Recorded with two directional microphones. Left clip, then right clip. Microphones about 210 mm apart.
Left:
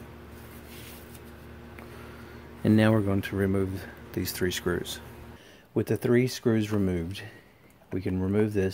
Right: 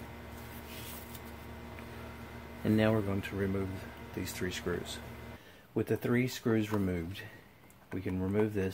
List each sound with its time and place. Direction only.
2.6 s speech: 50° left (ahead or behind)